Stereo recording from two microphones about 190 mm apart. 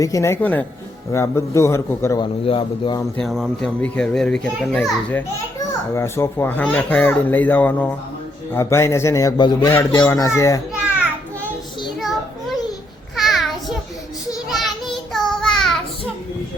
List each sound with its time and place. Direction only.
0.0 s a child's voice: 15° left (ahead or behind)
2.2 s a man's voice: 30° left (ahead or behind)
3.2 s a child's voice: centre (ahead or behind)
11.9 s a sound: centre (ahead or behind)
15.1 s child singing: centre (ahead or behind)